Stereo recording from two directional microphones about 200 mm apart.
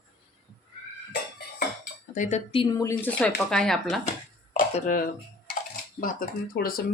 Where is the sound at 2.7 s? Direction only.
15° left (ahead or behind).